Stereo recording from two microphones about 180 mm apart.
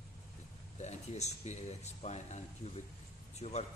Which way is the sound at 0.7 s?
40° left (ahead or behind).